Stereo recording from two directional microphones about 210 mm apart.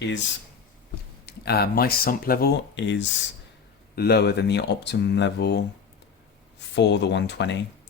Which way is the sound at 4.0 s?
50° left (ahead or behind).